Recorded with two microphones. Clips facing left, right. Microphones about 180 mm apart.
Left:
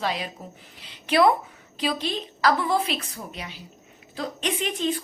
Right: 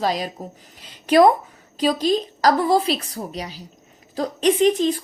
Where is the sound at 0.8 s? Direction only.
45° right (ahead or behind).